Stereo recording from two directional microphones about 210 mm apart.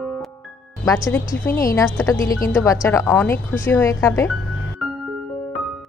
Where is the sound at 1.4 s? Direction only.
15° left (ahead or behind).